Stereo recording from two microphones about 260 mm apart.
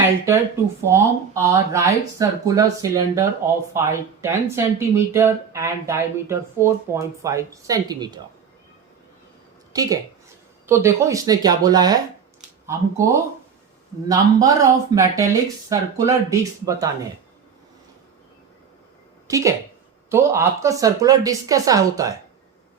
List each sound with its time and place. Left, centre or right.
0.8 s speech: centre
9.7 s speech: centre
12.4 s a sound: centre
14.1 s speech: centre
19.3 s speech: centre